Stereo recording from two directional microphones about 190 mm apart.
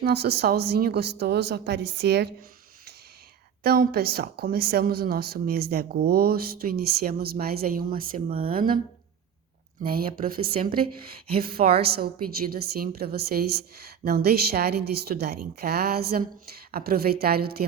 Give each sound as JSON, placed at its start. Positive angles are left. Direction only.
{"t": 0.0, "sound": "a woman's voice", "side_deg": -60}
{"t": 3.6, "sound": "a woman's voice", "side_deg": -55}
{"t": 9.8, "sound": "a woman's voice", "side_deg": -50}